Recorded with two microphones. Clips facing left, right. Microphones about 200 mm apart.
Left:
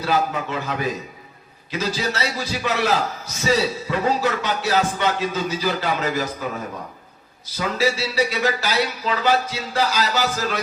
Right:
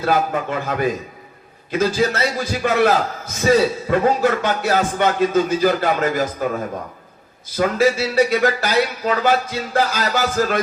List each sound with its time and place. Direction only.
0.0 s a man's voice: 50° right (ahead or behind)
7.5 s a man's voice: 50° right (ahead or behind)